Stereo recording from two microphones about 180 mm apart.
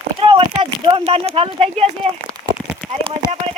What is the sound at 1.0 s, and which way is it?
Speech, 35° right (ahead or behind).